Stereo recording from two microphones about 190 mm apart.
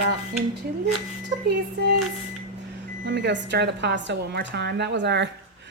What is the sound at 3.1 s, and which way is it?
A woman's voice, 70° right (ahead or behind).